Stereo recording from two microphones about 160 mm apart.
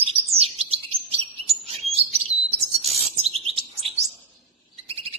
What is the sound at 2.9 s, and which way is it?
Chirp, 40° right (ahead or behind).